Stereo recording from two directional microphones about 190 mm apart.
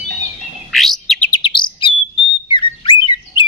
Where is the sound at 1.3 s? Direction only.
25° left (ahead or behind).